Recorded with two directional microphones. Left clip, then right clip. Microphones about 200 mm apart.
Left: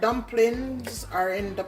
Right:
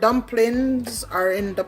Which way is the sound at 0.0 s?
55° right (ahead or behind).